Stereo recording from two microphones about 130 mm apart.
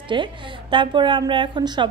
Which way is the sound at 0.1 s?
40° right (ahead or behind).